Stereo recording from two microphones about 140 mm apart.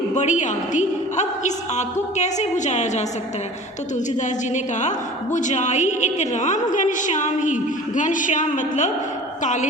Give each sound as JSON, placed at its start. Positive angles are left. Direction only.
{"t": 0.1, "sound": "a woman's voice", "side_deg": 60}